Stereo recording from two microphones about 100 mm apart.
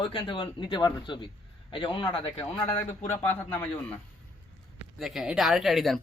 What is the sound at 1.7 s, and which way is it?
Speech, 55° left (ahead or behind).